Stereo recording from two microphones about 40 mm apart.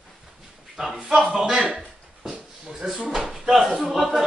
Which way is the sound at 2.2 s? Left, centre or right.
Centre.